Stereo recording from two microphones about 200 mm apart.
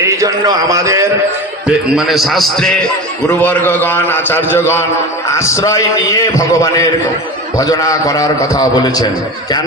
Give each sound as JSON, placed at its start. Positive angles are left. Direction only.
{"t": 0.0, "sound": "a man's voice", "side_deg": -15}
{"t": 1.6, "sound": "a man's voice", "side_deg": 0}